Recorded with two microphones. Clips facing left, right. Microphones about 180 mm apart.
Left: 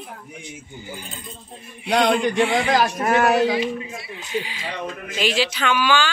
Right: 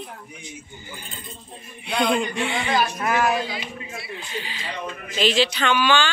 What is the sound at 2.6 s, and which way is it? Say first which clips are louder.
Speech: left 3 dB; 80° left.